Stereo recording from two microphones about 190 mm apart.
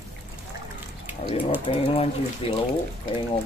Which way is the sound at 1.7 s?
30° left (ahead or behind).